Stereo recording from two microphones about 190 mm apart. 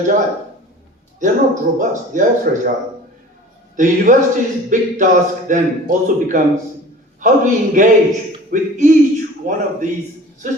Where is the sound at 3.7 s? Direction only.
40° right (ahead or behind).